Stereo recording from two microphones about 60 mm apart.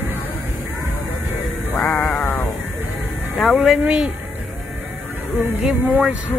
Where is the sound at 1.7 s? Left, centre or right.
Centre.